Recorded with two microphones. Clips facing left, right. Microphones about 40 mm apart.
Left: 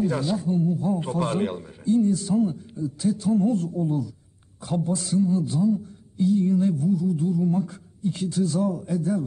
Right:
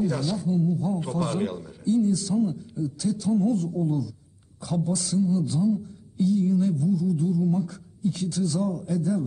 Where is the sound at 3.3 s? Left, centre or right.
Left.